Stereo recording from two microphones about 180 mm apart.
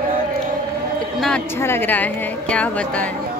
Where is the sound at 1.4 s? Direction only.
15° left (ahead or behind).